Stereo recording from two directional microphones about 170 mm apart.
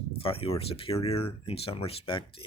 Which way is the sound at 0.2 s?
35° left (ahead or behind).